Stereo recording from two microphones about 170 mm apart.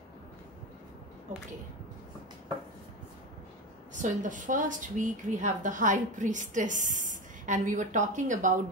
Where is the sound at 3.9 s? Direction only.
50° right (ahead or behind).